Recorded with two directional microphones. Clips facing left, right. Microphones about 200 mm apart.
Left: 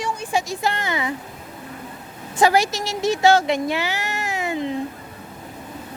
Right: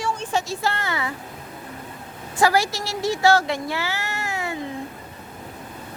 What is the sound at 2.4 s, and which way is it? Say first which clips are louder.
Speech: left 2 dB; 20° left (ahead or behind).